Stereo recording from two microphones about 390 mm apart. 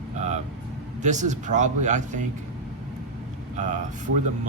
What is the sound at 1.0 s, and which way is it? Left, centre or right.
Speech, centre.